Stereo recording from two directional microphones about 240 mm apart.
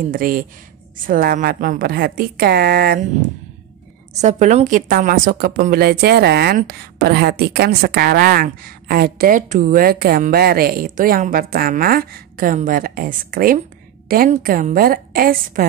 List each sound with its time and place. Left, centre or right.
0.1 s a woman's voice: right
4.1 s a woman's voice: right